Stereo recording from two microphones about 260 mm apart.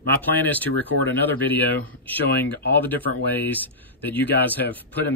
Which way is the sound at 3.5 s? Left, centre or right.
Centre.